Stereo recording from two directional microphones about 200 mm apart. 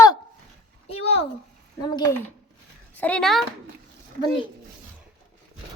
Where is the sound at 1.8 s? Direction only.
20° left (ahead or behind).